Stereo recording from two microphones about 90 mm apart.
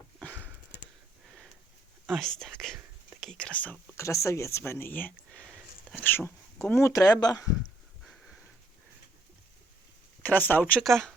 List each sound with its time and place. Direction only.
2.0 s speech: 5° left (ahead or behind)
3.9 s speech: 35° left (ahead or behind)
6.7 s speech: 35° left (ahead or behind)
8.0 s sniff: centre (ahead or behind)
10.2 s speech: 20° left (ahead or behind)
10.8 s speech: 5° left (ahead or behind)